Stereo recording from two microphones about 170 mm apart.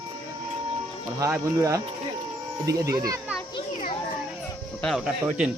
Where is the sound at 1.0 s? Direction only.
15° right (ahead or behind).